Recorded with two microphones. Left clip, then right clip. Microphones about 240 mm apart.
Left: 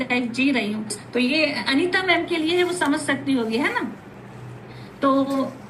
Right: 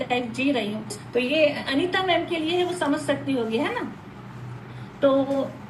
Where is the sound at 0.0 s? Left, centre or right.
Left.